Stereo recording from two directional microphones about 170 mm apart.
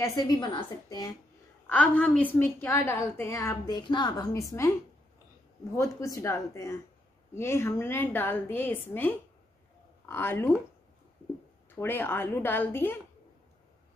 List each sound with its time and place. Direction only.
0.0 s a woman's voice: 20° left (ahead or behind)
1.7 s a woman's voice: 5° left (ahead or behind)
5.8 s a woman's voice: 20° left (ahead or behind)
11.8 s a woman's voice: 10° left (ahead or behind)